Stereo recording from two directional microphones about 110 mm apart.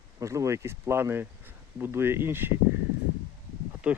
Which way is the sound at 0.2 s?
30° right (ahead or behind).